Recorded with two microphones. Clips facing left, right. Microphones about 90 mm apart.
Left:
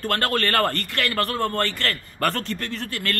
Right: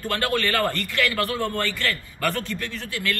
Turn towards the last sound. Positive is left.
turn(degrees=50)  # may be behind; listen again after turning